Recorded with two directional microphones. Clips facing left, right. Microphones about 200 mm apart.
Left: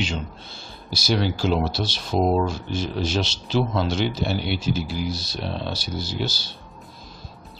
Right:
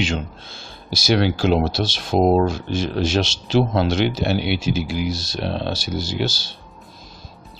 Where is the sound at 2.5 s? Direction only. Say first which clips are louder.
Right 4 dB; 90° right.